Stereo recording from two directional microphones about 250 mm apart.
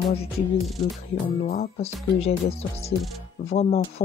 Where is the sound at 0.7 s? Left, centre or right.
Centre.